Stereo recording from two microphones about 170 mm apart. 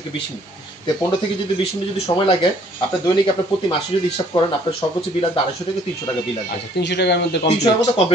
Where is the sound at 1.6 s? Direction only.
30° left (ahead or behind).